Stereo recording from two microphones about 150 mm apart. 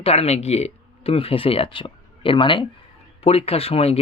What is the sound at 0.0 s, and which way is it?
Speech, 40° left (ahead or behind).